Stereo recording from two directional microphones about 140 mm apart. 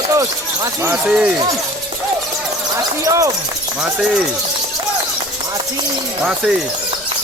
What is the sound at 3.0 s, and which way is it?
Speech, 25° right (ahead or behind).